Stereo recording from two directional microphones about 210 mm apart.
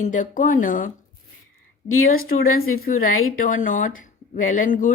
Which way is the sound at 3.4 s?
40° left (ahead or behind).